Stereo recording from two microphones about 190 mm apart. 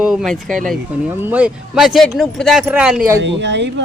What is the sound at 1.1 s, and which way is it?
Speech, 10° right (ahead or behind).